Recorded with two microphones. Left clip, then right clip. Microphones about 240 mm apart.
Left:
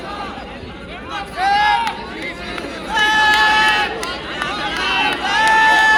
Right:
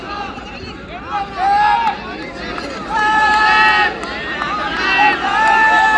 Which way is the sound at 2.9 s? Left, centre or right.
Left.